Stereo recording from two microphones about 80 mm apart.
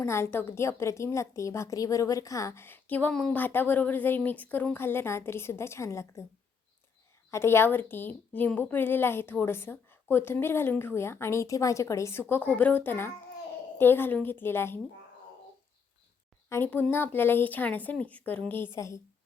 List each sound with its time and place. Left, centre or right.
0.0 s a woman's voice: left
3.1 s a woman's voice: centre
3.3 s a woman's voice: left
7.3 s a woman's voice: left
12.3 s a woman's voice: left
16.5 s a woman's voice: left
16.9 s a woman's voice: left
18.8 s a woman's voice: left